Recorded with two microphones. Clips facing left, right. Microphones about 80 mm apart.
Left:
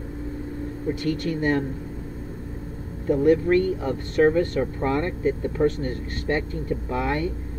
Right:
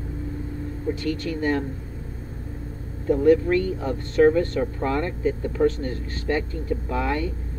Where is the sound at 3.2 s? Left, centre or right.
Left.